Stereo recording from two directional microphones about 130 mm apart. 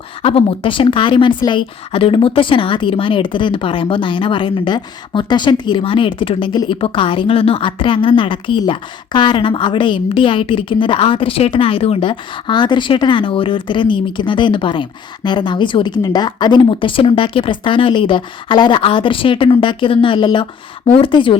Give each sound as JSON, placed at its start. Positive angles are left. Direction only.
{"t": 0.2, "sound": "a woman's voice", "side_deg": 45}